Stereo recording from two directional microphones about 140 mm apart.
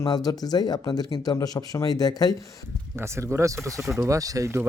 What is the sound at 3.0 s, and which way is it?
Speech, 20° right (ahead or behind).